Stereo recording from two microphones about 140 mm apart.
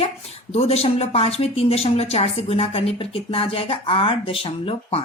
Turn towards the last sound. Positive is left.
turn(degrees=40)  # may be behind; listen again after turning